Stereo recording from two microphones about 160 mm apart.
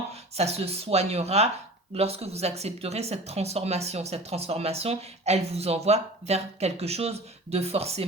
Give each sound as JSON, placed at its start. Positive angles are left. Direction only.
{"t": 0.1, "sound": "speech", "side_deg": -40}